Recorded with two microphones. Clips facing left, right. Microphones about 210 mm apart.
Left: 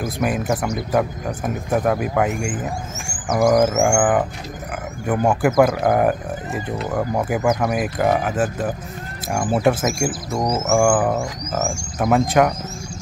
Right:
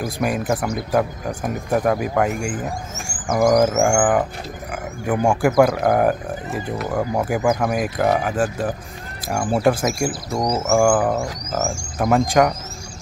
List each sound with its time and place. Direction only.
0.0 s speech: centre (ahead or behind)